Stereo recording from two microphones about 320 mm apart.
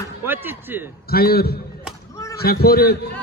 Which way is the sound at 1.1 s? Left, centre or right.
Left.